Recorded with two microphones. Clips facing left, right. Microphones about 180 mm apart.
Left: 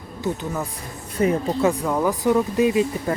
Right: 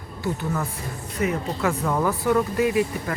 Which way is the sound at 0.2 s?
15° left (ahead or behind).